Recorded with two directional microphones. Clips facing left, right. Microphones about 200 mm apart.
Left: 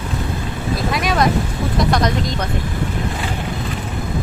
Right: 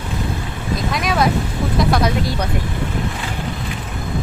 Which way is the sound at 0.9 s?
Centre (ahead or behind).